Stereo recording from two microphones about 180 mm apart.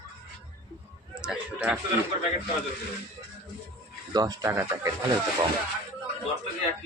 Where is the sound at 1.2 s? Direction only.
5° right (ahead or behind).